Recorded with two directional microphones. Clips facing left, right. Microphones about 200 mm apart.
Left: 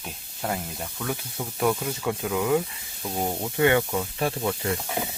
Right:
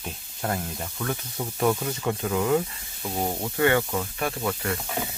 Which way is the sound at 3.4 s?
20° left (ahead or behind).